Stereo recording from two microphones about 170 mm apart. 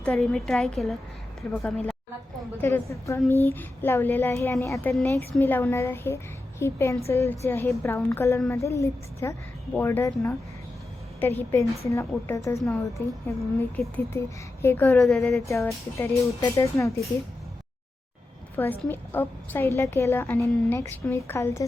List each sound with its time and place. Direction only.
0.0 s a woman's voice: 5° left (ahead or behind)
2.6 s a woman's voice: 15° left (ahead or behind)
11.9 s a woman's voice: 15° left (ahead or behind)
15.0 s a woman's voice: centre (ahead or behind)
15.4 s a woman's voice: 15° left (ahead or behind)
18.5 s a woman's voice: 10° left (ahead or behind)